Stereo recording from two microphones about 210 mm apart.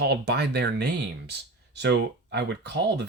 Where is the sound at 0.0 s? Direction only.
50° right (ahead or behind).